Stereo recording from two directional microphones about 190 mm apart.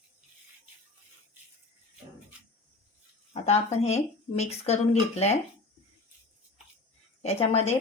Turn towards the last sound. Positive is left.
turn(degrees=35)  # may be behind; listen again after turning